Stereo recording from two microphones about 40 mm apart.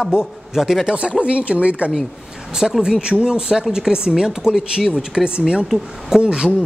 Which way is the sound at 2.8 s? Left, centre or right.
Centre.